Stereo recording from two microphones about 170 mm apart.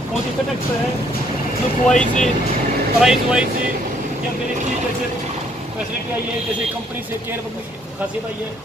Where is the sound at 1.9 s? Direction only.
5° left (ahead or behind).